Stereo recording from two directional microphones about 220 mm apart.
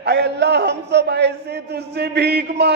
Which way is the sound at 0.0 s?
50° right (ahead or behind).